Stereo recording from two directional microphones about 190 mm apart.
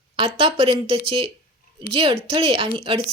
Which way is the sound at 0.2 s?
30° right (ahead or behind).